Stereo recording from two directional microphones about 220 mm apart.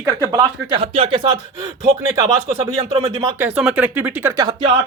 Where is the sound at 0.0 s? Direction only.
15° right (ahead or behind).